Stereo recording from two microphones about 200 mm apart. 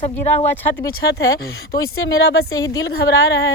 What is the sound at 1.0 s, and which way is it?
A woman's voice, 55° left (ahead or behind).